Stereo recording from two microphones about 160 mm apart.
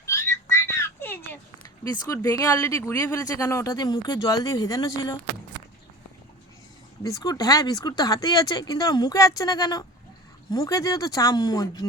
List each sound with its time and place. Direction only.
0.0 s a sound: 20° left (ahead or behind)
1.8 s speech: 25° left (ahead or behind)
7.0 s speech: 20° left (ahead or behind)